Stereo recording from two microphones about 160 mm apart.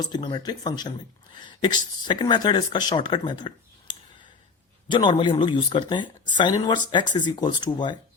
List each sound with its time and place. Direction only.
0.0 s speech: 25° left (ahead or behind)